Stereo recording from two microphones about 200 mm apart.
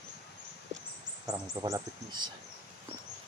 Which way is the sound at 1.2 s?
15° right (ahead or behind).